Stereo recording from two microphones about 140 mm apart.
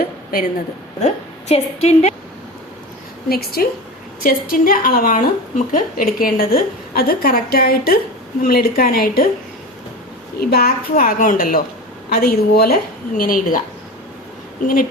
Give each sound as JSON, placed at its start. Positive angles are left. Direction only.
{"t": 0.0, "sound": "a sound", "side_deg": 90}
{"t": 1.0, "sound": "a woman's voice", "side_deg": 50}
{"t": 3.2, "sound": "speech", "side_deg": 90}
{"t": 10.4, "sound": "speech", "side_deg": 90}